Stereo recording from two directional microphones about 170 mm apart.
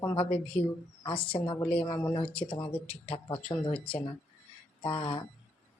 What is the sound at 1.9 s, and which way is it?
Speech, 25° left (ahead or behind).